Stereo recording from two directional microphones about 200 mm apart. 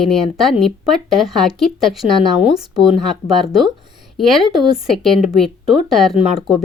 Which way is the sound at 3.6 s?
20° right (ahead or behind).